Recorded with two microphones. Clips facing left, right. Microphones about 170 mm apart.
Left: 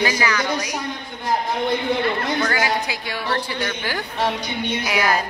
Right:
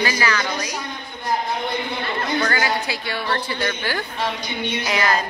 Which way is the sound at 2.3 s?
10° left (ahead or behind).